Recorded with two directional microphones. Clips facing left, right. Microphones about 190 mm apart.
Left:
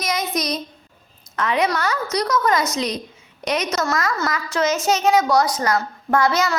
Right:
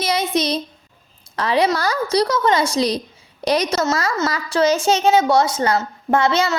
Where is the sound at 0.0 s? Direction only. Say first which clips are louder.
Right 4 dB; 30° right (ahead or behind).